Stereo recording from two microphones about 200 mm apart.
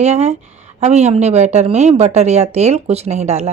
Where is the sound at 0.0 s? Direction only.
35° right (ahead or behind).